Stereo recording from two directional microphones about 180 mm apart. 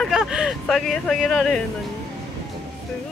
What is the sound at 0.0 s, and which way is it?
Speech, centre (ahead or behind).